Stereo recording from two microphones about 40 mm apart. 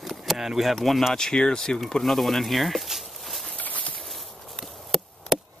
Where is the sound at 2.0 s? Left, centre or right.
Centre.